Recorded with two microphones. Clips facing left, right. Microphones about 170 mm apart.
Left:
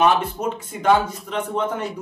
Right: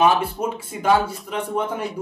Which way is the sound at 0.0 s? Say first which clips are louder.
Even; 10° right (ahead or behind).